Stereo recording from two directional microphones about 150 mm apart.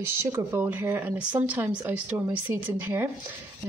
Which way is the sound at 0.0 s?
20° right (ahead or behind).